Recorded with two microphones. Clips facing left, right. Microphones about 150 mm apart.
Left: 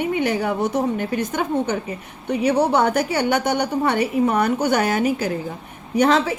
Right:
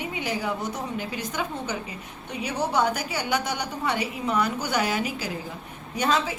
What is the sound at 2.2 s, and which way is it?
Speech, 65° left (ahead or behind).